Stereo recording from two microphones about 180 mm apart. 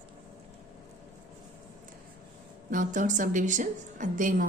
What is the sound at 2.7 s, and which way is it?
A woman's voice, 45° right (ahead or behind).